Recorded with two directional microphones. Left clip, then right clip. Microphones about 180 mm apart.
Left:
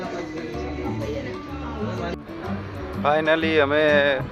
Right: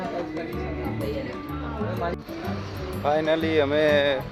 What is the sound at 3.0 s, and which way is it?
Speech, 20° left (ahead or behind).